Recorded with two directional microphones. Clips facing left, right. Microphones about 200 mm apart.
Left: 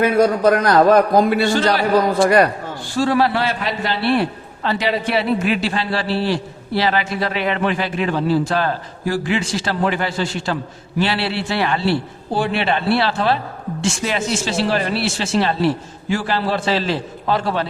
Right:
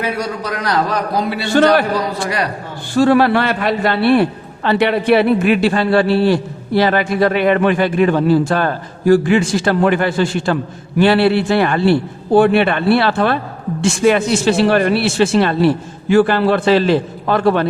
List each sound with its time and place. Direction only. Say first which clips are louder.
0.0 s a man's voice: left 7 dB; 50° left (ahead or behind)
2.9 s a man's voice: right 6 dB; 60° right (ahead or behind)